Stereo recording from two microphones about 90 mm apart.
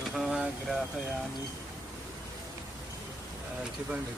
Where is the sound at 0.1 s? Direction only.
5° right (ahead or behind).